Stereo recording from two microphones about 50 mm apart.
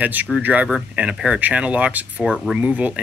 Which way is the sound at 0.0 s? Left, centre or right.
Right.